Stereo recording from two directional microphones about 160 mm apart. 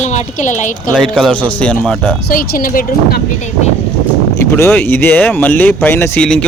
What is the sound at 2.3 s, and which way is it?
Speech, 60° left (ahead or behind).